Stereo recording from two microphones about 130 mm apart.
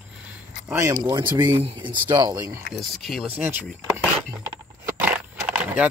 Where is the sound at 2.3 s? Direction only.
20° right (ahead or behind).